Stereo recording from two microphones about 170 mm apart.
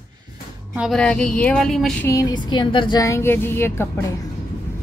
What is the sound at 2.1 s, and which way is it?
A woman's voice, 20° left (ahead or behind).